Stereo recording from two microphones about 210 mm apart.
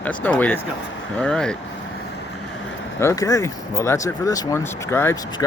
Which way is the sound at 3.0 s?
15° left (ahead or behind).